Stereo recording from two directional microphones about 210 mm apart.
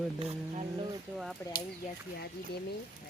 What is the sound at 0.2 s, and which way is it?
Speech, 30° right (ahead or behind).